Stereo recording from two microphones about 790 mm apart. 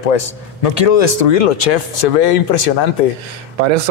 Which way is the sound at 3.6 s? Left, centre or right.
Right.